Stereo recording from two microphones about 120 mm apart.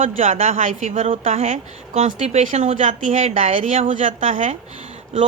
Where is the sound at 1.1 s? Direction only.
60° right (ahead or behind); by 4.8 s 90° right.